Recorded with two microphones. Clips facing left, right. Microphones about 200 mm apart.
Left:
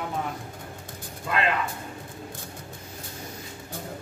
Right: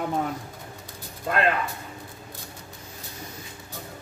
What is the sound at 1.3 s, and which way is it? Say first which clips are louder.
Speech: right 2 dB; 50° right (ahead or behind).